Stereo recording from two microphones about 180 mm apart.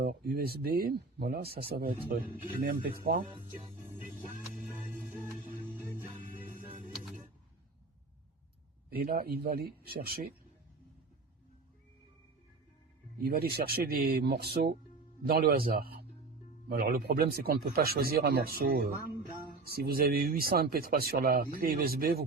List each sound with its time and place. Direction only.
0.0 s speech: 60° right (ahead or behind)
3.8 s music: 45° left (ahead or behind)
5.7 s music: 15° right (ahead or behind)
8.9 s speech: 60° right (ahead or behind)
13.1 s speech: 55° right (ahead or behind)